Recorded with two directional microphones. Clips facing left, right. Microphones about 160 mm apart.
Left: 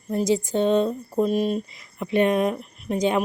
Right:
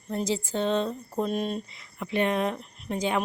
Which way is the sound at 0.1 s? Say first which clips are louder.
Left 6 dB; 15° left (ahead or behind).